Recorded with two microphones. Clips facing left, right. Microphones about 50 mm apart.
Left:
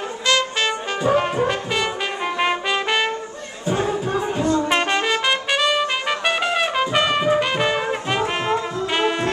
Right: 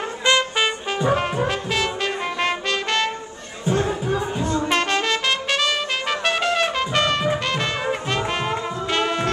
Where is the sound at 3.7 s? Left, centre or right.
Centre.